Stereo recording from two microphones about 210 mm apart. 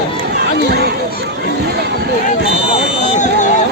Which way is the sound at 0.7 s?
50° right (ahead or behind).